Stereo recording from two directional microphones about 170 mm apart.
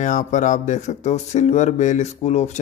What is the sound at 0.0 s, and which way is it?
Speech, 45° left (ahead or behind).